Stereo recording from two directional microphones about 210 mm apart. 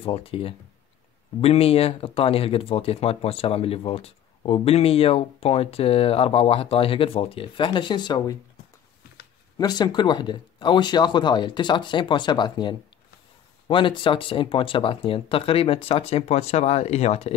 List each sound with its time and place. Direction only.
0.0 s speech: 25° left (ahead or behind)
9.6 s speech: 20° left (ahead or behind)